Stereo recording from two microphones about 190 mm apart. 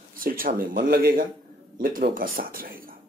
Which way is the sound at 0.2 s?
50° right (ahead or behind).